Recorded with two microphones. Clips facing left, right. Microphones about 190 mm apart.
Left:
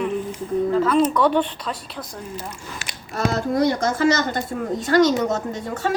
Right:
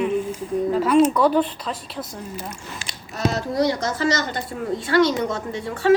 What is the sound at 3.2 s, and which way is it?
Speech, 50° left (ahead or behind).